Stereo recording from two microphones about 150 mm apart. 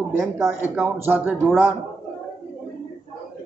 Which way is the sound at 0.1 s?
15° right (ahead or behind).